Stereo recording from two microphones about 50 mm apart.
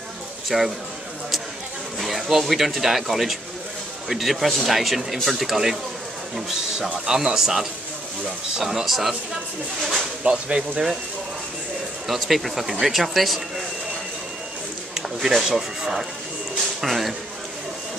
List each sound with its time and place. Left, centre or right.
0.5 s speech: centre
2.0 s speech: centre
10.2 s speech: right
12.1 s speech: centre
15.2 s speech: centre